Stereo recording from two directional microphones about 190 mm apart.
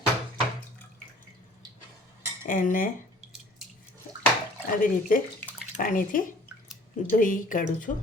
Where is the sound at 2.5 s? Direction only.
45° left (ahead or behind).